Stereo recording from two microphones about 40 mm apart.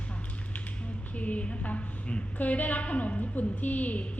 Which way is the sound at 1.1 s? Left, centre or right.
Left.